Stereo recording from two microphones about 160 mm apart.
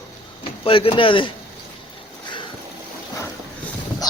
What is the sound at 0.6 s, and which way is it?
Speech, 35° left (ahead or behind).